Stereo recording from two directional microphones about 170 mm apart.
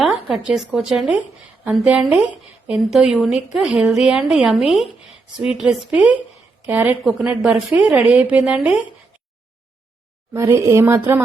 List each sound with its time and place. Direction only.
0.0 s a woman's voice: centre (ahead or behind)
10.3 s a woman's voice: 15° right (ahead or behind)